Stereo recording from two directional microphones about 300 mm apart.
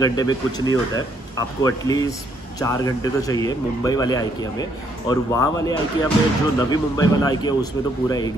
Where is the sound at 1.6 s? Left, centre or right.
Centre.